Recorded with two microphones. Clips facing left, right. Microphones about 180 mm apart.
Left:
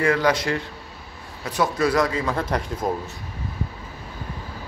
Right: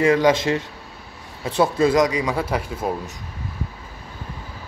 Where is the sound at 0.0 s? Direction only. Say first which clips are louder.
Right 4 dB; 20° right (ahead or behind).